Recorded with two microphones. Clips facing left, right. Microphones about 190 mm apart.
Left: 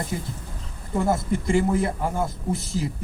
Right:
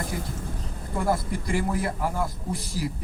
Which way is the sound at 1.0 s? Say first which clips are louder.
Left 3 dB; 25° left (ahead or behind).